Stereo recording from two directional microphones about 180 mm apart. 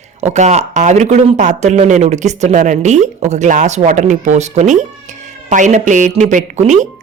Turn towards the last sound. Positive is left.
turn(degrees=-40)  # may be behind; listen again after turning